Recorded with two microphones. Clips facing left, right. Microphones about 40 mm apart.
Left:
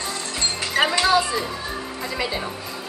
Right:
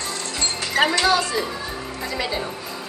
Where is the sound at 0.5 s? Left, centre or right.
Centre.